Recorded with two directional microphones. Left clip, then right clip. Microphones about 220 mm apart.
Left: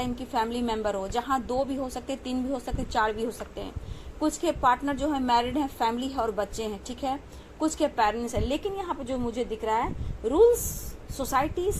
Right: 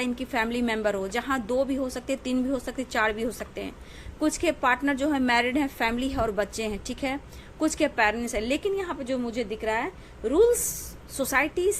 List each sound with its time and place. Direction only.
0.0 s a woman's voice: 30° right (ahead or behind)